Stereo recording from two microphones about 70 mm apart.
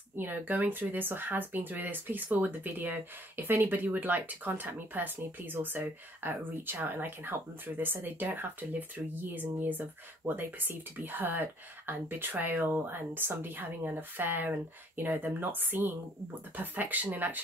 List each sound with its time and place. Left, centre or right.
0.2 s speech: right